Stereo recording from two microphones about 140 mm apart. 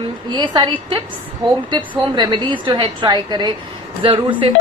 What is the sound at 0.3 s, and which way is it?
A woman's voice, 30° right (ahead or behind).